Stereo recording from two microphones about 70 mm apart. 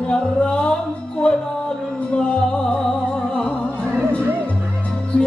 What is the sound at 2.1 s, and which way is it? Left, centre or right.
Music, centre.